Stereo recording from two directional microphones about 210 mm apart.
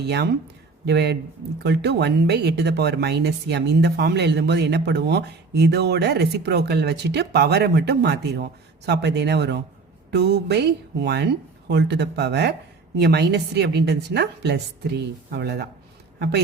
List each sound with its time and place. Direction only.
0.9 s speech: 55° right (ahead or behind)